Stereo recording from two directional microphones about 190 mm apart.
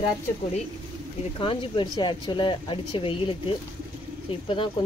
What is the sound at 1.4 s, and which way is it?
Speech, 30° left (ahead or behind).